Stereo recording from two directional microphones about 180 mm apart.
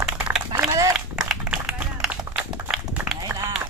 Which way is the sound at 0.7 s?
20° right (ahead or behind).